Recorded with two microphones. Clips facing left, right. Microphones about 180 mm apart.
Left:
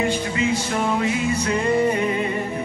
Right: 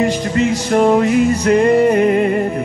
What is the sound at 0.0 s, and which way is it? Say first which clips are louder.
Music: right 6 dB; 40° right (ahead or behind).